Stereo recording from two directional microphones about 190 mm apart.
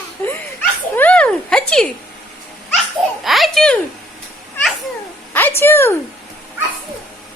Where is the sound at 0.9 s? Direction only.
5° left (ahead or behind).